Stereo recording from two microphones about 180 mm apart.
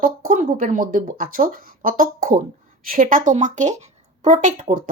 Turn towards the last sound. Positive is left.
turn(degrees=-45)  # may be behind; listen again after turning